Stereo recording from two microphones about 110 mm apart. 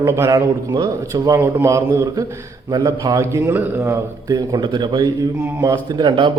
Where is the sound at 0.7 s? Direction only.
35° right (ahead or behind).